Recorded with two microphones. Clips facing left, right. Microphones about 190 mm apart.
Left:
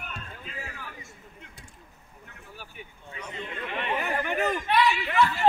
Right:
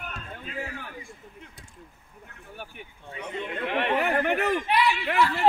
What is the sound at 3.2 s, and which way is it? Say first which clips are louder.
Chatter: right 5 dB; 65° right (ahead or behind).